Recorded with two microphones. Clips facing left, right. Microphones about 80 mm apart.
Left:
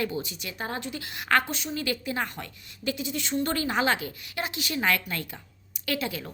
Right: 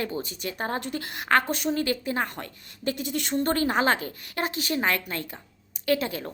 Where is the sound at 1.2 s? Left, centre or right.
Right.